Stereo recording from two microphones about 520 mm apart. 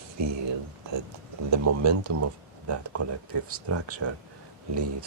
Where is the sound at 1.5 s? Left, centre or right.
Right.